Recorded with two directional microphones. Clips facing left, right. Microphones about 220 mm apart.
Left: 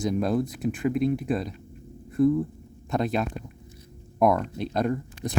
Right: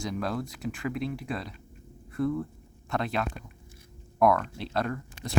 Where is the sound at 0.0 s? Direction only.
20° left (ahead or behind).